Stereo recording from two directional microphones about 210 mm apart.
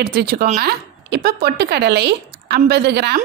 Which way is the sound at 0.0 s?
45° right (ahead or behind).